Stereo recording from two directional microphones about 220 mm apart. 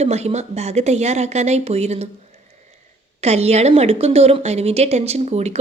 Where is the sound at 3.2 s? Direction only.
30° right (ahead or behind).